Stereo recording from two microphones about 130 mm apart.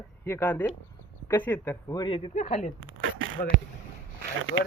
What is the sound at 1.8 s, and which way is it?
Speech, 30° left (ahead or behind).